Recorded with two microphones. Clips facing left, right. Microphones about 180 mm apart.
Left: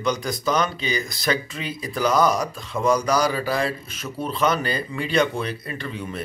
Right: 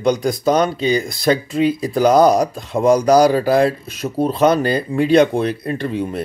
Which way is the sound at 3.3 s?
55° right (ahead or behind).